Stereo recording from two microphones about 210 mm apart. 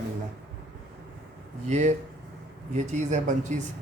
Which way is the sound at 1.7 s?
35° right (ahead or behind).